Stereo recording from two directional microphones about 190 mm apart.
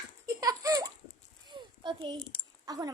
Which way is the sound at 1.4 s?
25° right (ahead or behind).